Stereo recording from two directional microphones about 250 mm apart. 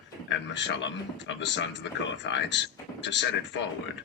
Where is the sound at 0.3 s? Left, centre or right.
Left.